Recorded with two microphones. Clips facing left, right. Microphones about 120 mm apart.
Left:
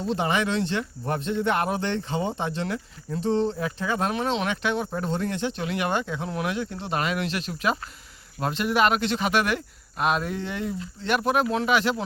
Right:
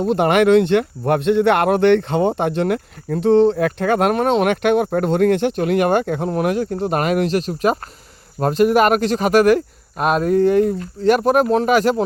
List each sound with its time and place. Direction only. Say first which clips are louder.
0.0 s speech: right 10 dB; 60° right (ahead or behind); by 12.0 s 45° right (ahead or behind)